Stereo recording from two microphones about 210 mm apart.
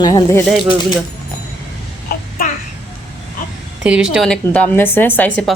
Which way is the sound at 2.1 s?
45° left (ahead or behind).